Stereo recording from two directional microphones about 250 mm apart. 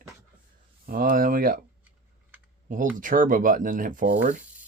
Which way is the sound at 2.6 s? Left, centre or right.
Right.